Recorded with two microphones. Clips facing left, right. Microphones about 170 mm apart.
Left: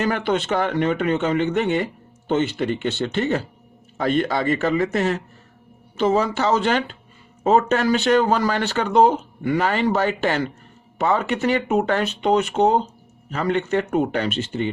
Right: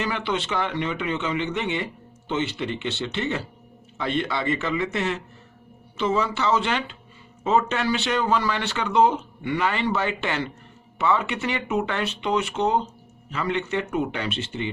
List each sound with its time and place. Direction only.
0.0 s speech: 45° left (ahead or behind)